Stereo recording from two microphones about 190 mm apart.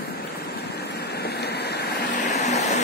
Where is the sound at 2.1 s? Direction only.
40° left (ahead or behind).